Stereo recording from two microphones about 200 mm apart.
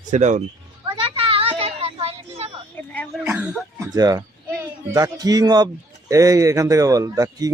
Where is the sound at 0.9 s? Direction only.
25° right (ahead or behind).